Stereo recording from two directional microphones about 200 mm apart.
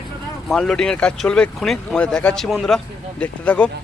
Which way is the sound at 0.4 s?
Centre (ahead or behind).